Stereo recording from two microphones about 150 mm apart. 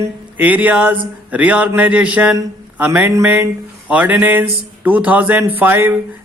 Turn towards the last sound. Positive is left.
turn(degrees=-15)  # may be behind; listen again after turning